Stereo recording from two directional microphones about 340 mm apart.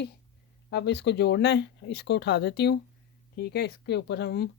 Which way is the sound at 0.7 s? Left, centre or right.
Left.